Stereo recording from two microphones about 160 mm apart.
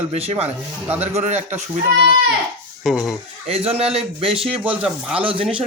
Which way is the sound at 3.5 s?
40° right (ahead or behind).